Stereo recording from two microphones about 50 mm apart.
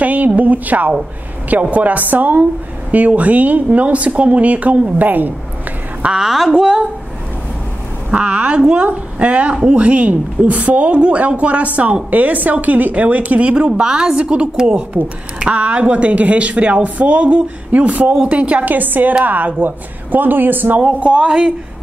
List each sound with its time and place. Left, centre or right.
0.0 s a sound: right
0.4 s a woman's voice: right
6.1 s a woman's voice: centre
6.5 s a woman's voice: centre
8.1 s a woman's voice: right
18.7 s speech: right
20.8 s a woman's voice: right